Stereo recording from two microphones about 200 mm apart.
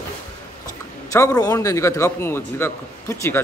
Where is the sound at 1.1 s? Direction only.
15° left (ahead or behind).